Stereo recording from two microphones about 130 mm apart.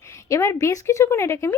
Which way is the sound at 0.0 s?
20° left (ahead or behind).